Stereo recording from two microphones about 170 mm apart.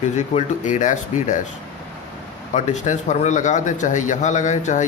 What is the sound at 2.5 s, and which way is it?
Speech, 45° left (ahead or behind).